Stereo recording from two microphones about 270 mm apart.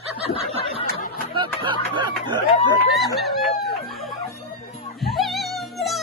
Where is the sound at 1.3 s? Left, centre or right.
Centre.